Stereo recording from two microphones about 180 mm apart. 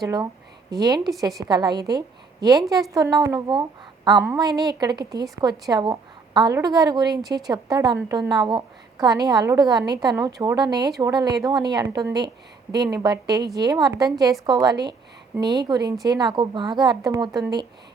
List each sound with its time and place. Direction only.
0.0 s a woman's voice: 20° right (ahead or behind)